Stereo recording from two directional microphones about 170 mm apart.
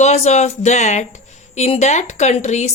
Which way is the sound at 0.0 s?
40° left (ahead or behind).